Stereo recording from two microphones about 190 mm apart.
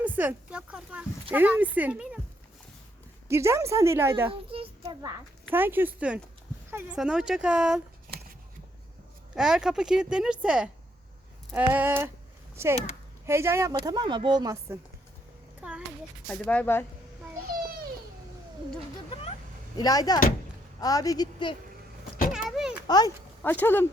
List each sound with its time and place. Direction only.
0.0 s speech: 10° right (ahead or behind)
3.2 s speech: 15° right (ahead or behind)
4.3 s a child's voice: 30° right (ahead or behind)
5.5 s speech: 10° right (ahead or behind)
9.3 s speech: 5° right (ahead or behind)
16.2 s speech: 5° left (ahead or behind)
19.7 s a woman's voice: 20° left (ahead or behind)
22.3 s a sound: centre (ahead or behind)
22.9 s a woman's voice: 20° left (ahead or behind)
23.4 s speech: 10° left (ahead or behind)